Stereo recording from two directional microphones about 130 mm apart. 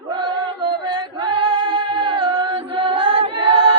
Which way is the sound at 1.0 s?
35° right (ahead or behind).